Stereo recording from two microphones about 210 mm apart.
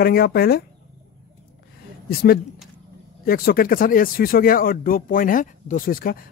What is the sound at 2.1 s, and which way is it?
Speech, 45° left (ahead or behind).